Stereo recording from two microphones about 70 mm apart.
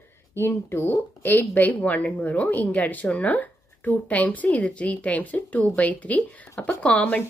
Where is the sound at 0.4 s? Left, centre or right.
Left.